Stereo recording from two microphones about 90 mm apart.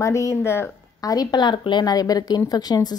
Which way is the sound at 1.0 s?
45° left (ahead or behind).